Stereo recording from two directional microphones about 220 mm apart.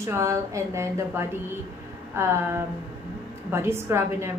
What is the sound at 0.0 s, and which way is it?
A woman's voice, 15° right (ahead or behind).